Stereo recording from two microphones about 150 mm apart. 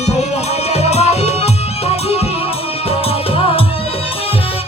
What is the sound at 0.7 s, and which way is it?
Music, 45° left (ahead or behind).